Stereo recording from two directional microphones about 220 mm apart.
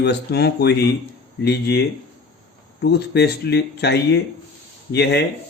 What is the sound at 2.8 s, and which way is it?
Speech, 50° left (ahead or behind).